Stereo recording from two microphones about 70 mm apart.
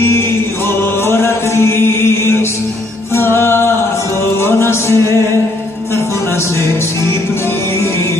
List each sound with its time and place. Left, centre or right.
1.0 s chant: left
3.2 s music: left